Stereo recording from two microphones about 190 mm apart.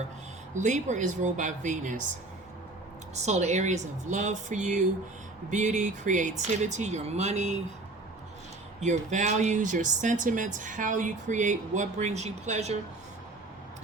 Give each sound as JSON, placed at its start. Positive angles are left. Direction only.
{"t": 0.5, "sound": "speech", "side_deg": -40}
{"t": 3.2, "sound": "speech", "side_deg": -35}
{"t": 8.8, "sound": "speech", "side_deg": -40}